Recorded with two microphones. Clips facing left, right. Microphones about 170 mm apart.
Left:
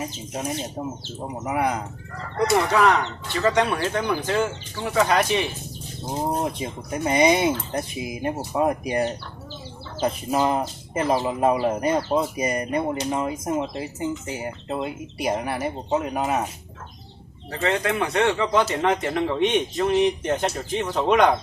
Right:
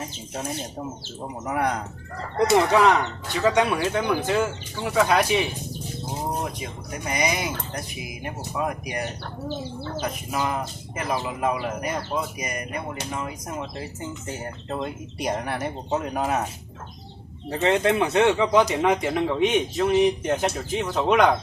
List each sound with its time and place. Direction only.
1.5 s speech: 5° left (ahead or behind)
2.5 s speech: 20° right (ahead or behind)
6.4 s speech: 25° left (ahead or behind)
9.2 s bird: 55° right (ahead or behind)
10.0 s speech: 30° left (ahead or behind); by 16.4 s centre (ahead or behind)
17.5 s speech: 25° right (ahead or behind); by 21.3 s centre (ahead or behind)